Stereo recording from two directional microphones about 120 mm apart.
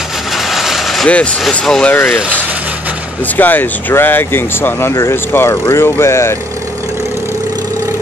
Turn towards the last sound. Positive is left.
turn(degrees=20)  # may be behind; listen again after turning